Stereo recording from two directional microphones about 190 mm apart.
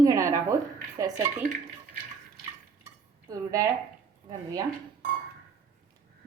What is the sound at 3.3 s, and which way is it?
Speech, 15° right (ahead or behind).